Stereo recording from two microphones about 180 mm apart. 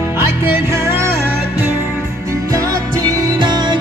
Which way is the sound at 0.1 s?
15° right (ahead or behind).